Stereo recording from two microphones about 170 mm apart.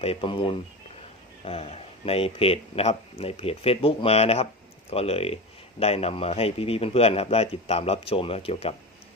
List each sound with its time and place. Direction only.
0.0 s speech: 35° left (ahead or behind)